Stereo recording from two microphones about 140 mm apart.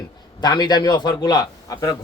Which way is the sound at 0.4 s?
30° left (ahead or behind).